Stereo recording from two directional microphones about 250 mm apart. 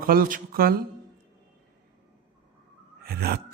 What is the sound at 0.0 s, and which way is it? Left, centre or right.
Speech, right.